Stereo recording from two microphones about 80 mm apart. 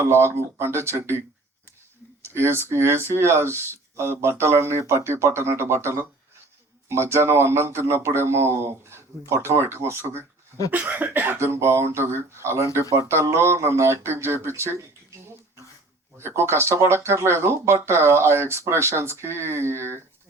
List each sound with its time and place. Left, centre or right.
0.0 s speech: right
2.2 s speech: right
16.1 s speech: right